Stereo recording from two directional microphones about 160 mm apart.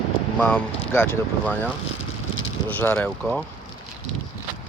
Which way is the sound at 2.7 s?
10° left (ahead or behind).